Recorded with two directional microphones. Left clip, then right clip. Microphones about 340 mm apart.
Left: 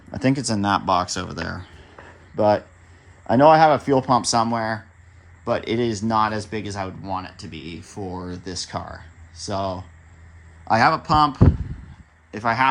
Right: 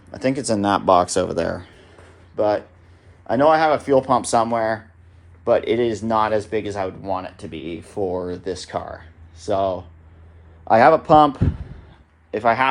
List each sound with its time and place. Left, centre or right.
0.1 s speech: left
0.4 s speech: centre
1.6 s a sound: left
3.2 s speech: left